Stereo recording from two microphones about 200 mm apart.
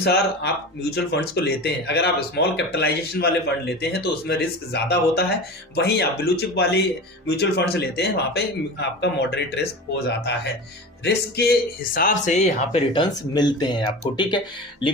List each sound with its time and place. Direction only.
0.0 s speech: 55° left (ahead or behind); by 12.8 s 35° left (ahead or behind)
12.9 s speech: 20° left (ahead or behind)